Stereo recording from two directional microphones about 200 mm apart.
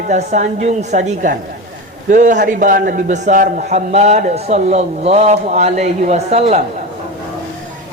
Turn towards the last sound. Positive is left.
turn(degrees=-30)  # may be behind; listen again after turning